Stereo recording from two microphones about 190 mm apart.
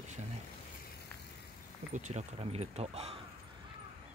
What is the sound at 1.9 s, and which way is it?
Speech, 40° right (ahead or behind).